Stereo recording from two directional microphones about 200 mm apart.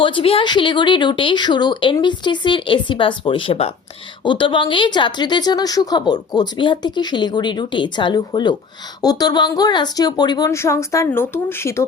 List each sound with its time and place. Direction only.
0.0 s a woman's voice: 25° left (ahead or behind)